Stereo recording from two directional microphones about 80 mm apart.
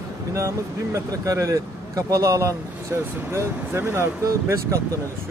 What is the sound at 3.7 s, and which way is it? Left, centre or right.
Speech, right.